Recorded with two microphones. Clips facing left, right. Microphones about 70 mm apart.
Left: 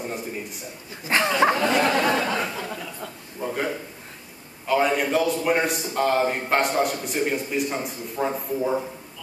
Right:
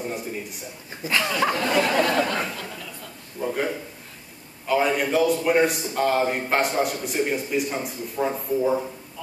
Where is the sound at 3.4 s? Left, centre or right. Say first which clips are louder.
Right 1 dB; centre.